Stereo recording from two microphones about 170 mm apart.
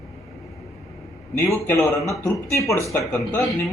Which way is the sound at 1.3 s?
15° left (ahead or behind).